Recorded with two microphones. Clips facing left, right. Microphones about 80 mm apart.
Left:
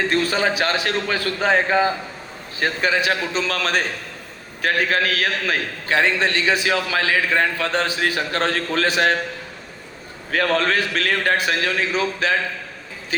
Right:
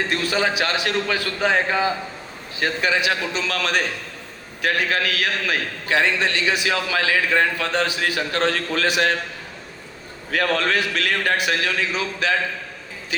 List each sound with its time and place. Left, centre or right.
0.1 s a man's voice: left
10.3 s a man's voice: left